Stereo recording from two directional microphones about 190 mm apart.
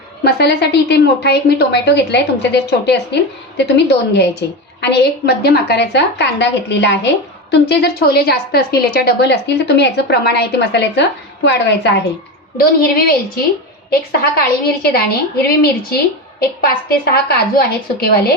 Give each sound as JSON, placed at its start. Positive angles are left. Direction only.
{"t": 0.3, "sound": "a woman's voice", "side_deg": 60}
{"t": 12.5, "sound": "a woman's voice", "side_deg": 50}